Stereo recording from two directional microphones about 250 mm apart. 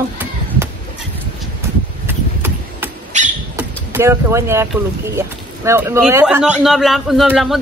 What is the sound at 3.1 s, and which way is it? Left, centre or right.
Bird, right.